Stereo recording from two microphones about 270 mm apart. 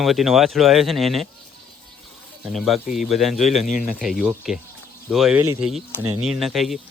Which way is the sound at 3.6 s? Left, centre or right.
Left.